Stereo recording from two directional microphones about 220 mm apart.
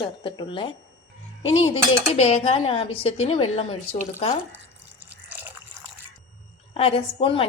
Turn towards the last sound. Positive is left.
turn(degrees=25)  # may be behind; listen again after turning